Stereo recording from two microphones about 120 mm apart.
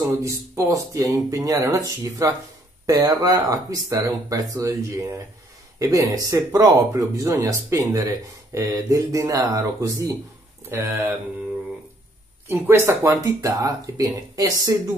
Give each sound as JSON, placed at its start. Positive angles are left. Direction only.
{"t": 0.2, "sound": "speech", "side_deg": -25}
{"t": 12.4, "sound": "speech", "side_deg": -20}